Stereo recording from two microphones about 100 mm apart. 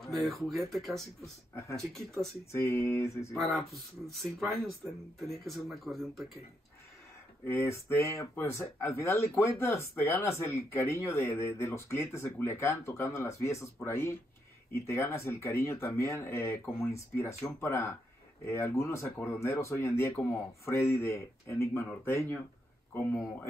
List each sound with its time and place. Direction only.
0.0 s speech: centre (ahead or behind)
1.5 s speech: 30° left (ahead or behind)
1.8 s speech: centre (ahead or behind)
2.5 s speech: 30° left (ahead or behind)
3.3 s speech: centre (ahead or behind)
7.4 s speech: 30° left (ahead or behind)